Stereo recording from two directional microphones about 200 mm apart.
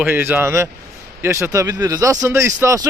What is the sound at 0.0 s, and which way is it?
Speech, 10° right (ahead or behind).